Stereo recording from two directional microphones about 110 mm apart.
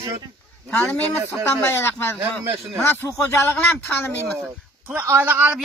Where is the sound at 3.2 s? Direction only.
20° left (ahead or behind).